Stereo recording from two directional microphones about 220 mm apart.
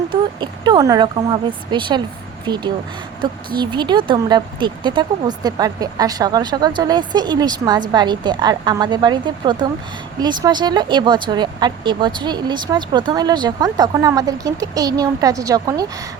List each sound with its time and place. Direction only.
0.1 s speech: 20° right (ahead or behind)